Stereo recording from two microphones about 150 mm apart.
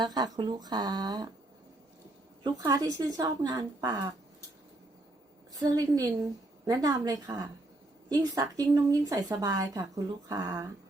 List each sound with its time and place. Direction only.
0.0 s speech: 25° right (ahead or behind)
2.4 s speech: 25° right (ahead or behind)
5.5 s speech: 25° right (ahead or behind)